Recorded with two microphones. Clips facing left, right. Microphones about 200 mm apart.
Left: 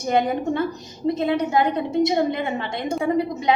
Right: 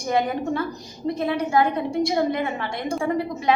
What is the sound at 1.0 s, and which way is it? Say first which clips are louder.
A woman's voice: left 3 dB; 20° left (ahead or behind).